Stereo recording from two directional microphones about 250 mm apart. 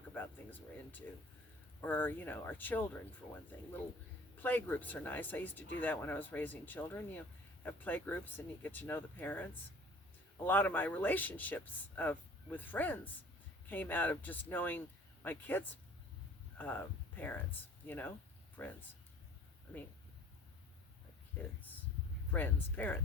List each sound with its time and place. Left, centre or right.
0.1 s speech: centre
4.4 s speech: centre
21.4 s speech: centre